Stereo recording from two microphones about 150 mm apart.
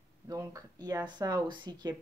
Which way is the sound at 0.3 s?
25° right (ahead or behind).